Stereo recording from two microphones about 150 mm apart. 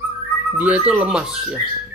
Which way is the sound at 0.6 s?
10° right (ahead or behind).